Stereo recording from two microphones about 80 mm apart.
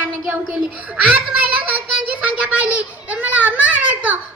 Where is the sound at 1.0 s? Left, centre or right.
Centre.